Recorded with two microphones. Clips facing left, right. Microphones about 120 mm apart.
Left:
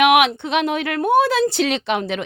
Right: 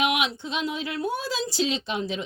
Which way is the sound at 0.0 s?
65° left (ahead or behind).